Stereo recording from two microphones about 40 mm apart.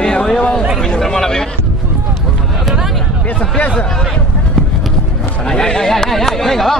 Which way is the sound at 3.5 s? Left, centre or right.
Left.